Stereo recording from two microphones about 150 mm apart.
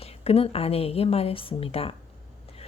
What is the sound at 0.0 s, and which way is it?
A woman's voice, 40° left (ahead or behind).